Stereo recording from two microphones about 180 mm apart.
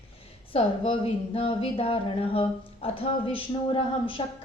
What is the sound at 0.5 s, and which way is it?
Speech, 30° left (ahead or behind).